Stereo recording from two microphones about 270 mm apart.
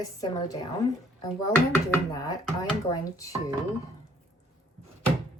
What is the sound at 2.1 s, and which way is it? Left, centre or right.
Speech, centre.